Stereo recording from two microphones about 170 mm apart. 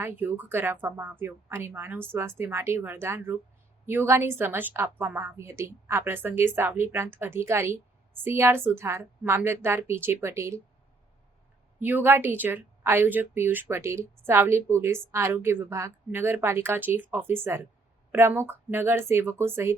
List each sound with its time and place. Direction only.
0.0 s a woman's voice: 10° right (ahead or behind)
11.8 s a woman's voice: 10° right (ahead or behind)